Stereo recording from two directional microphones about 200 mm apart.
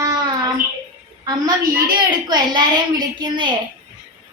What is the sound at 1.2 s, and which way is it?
A woman's voice, 20° right (ahead or behind).